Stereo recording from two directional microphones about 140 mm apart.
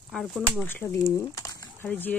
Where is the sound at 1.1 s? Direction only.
20° left (ahead or behind).